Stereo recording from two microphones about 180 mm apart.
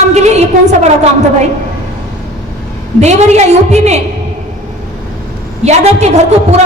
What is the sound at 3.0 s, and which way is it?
A woman's voice, 40° right (ahead or behind).